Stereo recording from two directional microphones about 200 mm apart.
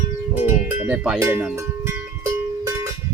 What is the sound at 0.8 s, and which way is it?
Speech, 10° right (ahead or behind).